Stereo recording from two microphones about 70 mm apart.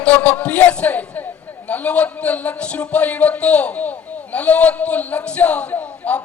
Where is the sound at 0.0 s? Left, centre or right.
Left.